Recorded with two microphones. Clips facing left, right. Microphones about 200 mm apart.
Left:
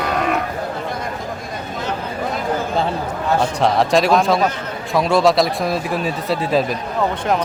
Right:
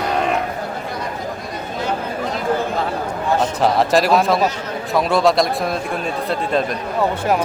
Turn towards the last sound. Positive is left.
turn(degrees=5)  # may be behind; listen again after turning